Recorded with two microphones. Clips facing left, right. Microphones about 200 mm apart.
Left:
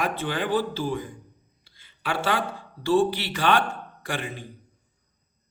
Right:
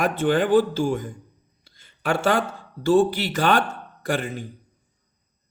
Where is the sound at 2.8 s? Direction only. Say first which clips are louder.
Right 3 dB; 45° right (ahead or behind).